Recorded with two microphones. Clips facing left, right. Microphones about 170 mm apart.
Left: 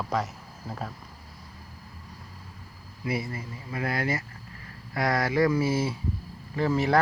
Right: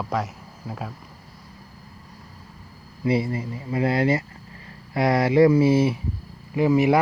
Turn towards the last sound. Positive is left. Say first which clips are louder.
# right 7 dB
turn(degrees=-15)  # may be behind; listen again after turning